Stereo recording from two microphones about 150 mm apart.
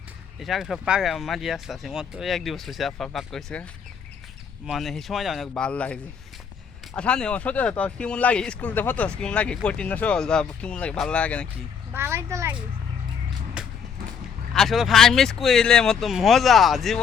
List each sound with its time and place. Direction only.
0.3 s speech: centre (ahead or behind)
11.9 s a child's voice: 20° right (ahead or behind)
13.6 s a sound: 5° right (ahead or behind)
14.5 s speech: centre (ahead or behind)